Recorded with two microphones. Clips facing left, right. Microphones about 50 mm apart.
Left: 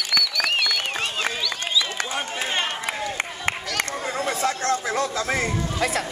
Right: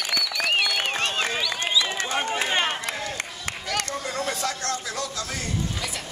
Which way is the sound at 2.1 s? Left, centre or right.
Centre.